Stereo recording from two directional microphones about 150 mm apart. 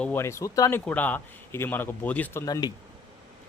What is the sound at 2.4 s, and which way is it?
Speech, 25° left (ahead or behind).